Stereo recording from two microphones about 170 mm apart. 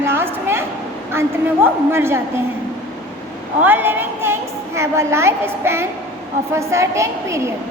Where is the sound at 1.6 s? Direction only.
15° right (ahead or behind).